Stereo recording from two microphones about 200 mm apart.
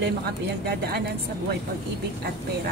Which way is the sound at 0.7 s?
55° right (ahead or behind).